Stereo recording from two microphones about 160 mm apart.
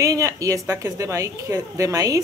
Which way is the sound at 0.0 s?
20° right (ahead or behind).